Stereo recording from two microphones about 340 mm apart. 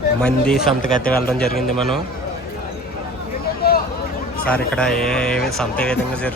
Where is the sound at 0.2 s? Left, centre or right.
Centre.